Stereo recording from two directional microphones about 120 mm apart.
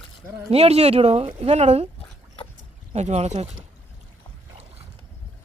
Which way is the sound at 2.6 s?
70° right (ahead or behind).